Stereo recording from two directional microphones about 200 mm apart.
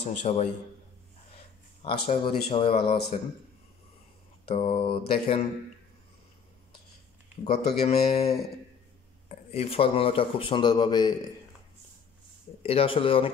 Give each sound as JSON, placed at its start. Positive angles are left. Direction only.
{"t": 0.2, "sound": "speech", "side_deg": 35}
{"t": 1.8, "sound": "speech", "side_deg": 25}
{"t": 4.5, "sound": "speech", "side_deg": 30}
{"t": 7.4, "sound": "speech", "side_deg": 30}
{"t": 9.3, "sound": "speech", "side_deg": 30}
{"t": 12.6, "sound": "speech", "side_deg": 30}